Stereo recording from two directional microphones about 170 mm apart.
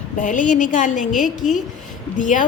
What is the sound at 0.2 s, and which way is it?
A woman's voice, 50° left (ahead or behind).